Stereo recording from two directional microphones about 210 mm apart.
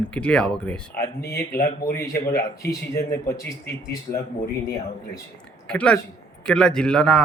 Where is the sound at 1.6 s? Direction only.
45° left (ahead or behind).